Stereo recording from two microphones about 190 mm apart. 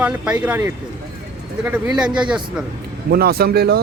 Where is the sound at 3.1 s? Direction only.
55° right (ahead or behind).